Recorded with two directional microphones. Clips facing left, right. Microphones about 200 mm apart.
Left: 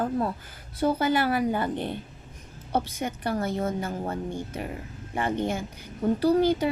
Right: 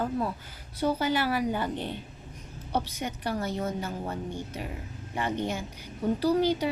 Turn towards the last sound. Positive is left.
turn(degrees=50)  # may be behind; listen again after turning